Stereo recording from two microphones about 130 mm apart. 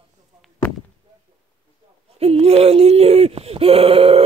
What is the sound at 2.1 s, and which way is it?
Speech, 50° right (ahead or behind).